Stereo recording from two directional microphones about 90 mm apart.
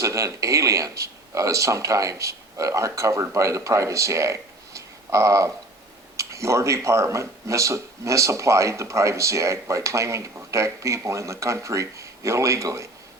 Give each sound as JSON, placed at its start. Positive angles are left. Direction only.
{"t": 0.0, "sound": "speech", "side_deg": -35}